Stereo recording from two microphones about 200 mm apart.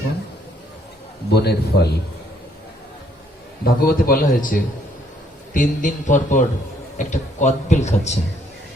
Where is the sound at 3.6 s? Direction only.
50° left (ahead or behind).